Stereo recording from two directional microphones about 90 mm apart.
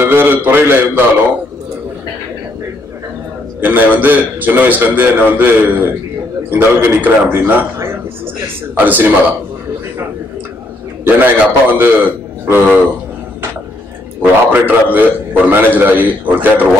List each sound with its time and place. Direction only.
0.0 s a man's voice: 25° right (ahead or behind)
3.6 s a man's voice: 20° right (ahead or behind)
11.1 s a man's voice: 20° right (ahead or behind)
14.2 s a man's voice: 20° right (ahead or behind)